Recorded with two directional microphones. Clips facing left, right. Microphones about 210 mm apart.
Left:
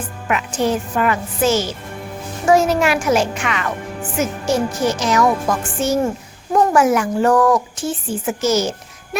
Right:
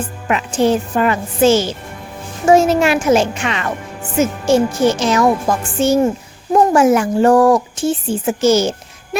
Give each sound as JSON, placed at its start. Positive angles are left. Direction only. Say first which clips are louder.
{"t": 0.3, "sound": "speech", "louder": "right 4 dB", "side_deg": -30}